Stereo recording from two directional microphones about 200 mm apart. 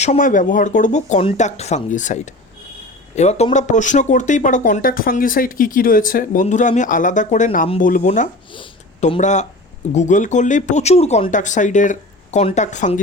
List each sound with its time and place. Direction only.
0.0 s speech: 35° left (ahead or behind)